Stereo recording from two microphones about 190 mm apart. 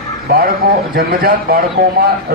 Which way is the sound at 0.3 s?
50° right (ahead or behind).